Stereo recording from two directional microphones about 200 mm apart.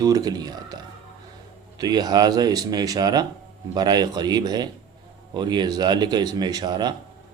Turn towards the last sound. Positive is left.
turn(degrees=-20)  # may be behind; listen again after turning